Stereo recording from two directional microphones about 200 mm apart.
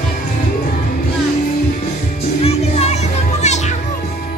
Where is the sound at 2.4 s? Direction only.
30° left (ahead or behind).